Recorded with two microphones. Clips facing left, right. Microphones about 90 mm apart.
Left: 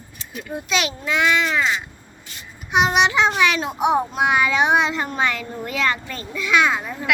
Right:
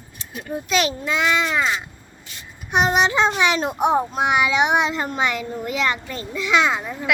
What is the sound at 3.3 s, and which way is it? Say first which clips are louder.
A child's voice: even; 25° right (ahead or behind).